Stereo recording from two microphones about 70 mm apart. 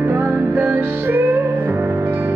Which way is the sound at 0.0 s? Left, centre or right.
Right.